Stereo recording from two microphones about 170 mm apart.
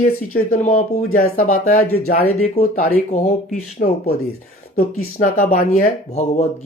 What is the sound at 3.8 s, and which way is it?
Speech, 55° left (ahead or behind).